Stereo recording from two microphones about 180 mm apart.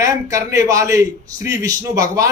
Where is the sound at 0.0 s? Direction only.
15° right (ahead or behind).